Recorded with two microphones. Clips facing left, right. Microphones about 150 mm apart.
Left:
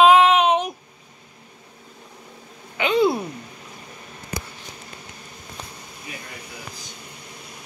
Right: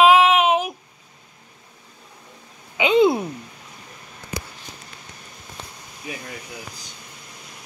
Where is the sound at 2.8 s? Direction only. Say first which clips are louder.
Right 3 dB; 20° right (ahead or behind).